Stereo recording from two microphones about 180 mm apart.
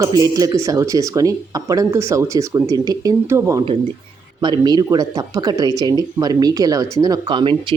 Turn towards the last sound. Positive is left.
turn(degrees=-25)  # may be behind; listen again after turning